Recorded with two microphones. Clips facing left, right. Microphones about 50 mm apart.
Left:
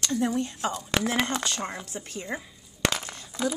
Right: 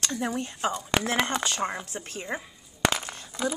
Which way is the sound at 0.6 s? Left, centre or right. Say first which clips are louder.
Right 1 dB; centre.